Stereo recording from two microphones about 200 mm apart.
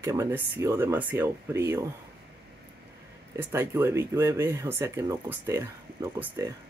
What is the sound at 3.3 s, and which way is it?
Speech, 10° right (ahead or behind).